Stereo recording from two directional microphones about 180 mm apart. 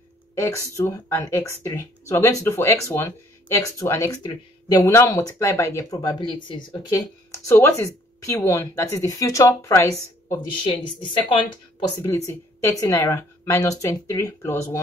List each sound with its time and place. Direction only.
0.4 s speech: 15° left (ahead or behind)
12.6 s speech: 20° left (ahead or behind)